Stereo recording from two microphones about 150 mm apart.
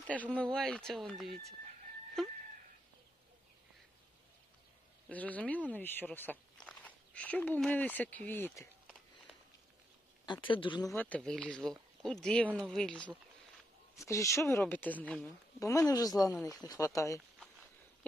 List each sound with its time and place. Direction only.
0.0 s speech: 10° left (ahead or behind)
5.0 s speech: 10° left (ahead or behind)
10.2 s speech: 35° left (ahead or behind)
10.9 s speech: 10° left (ahead or behind)
13.9 s speech: 20° left (ahead or behind)
15.6 s speech: 20° left (ahead or behind)